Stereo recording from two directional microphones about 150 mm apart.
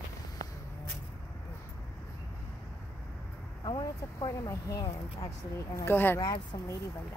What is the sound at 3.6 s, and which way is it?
Speech, 30° left (ahead or behind).